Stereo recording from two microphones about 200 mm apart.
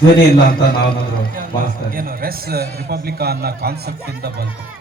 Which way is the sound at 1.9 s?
45° right (ahead or behind).